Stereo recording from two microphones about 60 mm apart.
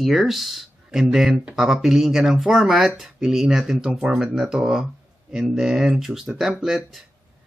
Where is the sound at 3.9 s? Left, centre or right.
Centre.